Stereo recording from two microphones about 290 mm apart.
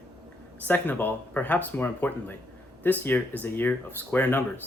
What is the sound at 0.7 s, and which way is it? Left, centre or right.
Speech, centre.